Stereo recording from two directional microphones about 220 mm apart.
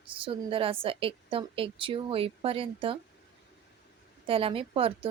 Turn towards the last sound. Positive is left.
turn(degrees=-25)  # may be behind; listen again after turning